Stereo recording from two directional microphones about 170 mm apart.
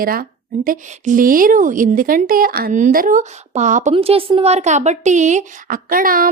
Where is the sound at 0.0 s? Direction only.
60° right (ahead or behind).